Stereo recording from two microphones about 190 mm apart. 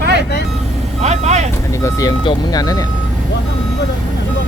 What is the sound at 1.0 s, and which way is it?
Speech, 35° right (ahead or behind).